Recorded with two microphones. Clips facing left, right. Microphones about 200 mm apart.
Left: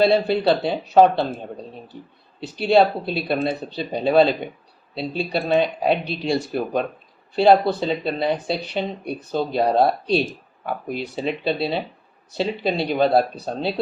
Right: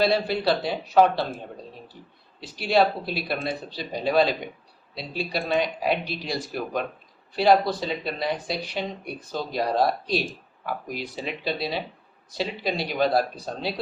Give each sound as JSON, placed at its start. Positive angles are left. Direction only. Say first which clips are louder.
{"t": 0.0, "sound": "speech", "louder": "left 5 dB", "side_deg": 25}
{"t": 2.6, "sound": "speech", "louder": "left 5 dB", "side_deg": 25}